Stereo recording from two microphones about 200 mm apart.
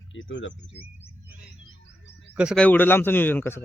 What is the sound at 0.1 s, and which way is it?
Speech, 70° left (ahead or behind).